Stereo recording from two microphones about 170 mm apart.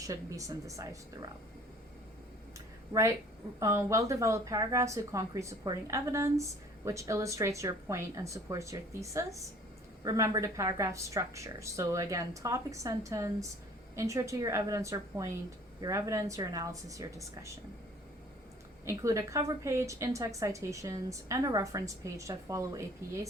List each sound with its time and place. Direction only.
0.0 s a woman's voice: 20° right (ahead or behind)
2.9 s a woman's voice: 20° right (ahead or behind)
18.9 s a woman's voice: 15° right (ahead or behind)